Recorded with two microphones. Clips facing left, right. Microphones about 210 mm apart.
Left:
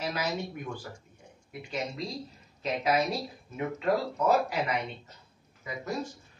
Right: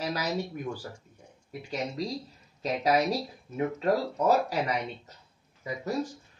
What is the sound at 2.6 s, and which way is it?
A man's voice, 40° right (ahead or behind).